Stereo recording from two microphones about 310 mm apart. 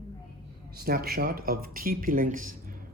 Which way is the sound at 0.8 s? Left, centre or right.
Right.